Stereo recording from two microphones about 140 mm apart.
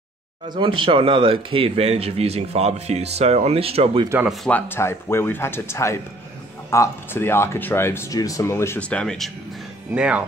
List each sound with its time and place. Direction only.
0.5 s speech: 35° right (ahead or behind)
4.5 s speech: 15° left (ahead or behind)
9.9 s speech: 5° right (ahead or behind)